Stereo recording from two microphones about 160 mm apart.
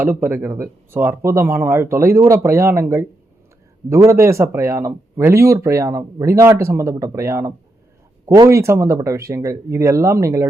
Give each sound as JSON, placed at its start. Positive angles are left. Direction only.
{"t": 0.0, "sound": "speech", "side_deg": -15}